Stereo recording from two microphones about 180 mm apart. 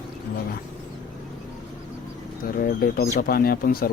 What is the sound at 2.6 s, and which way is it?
Speech, 55° left (ahead or behind).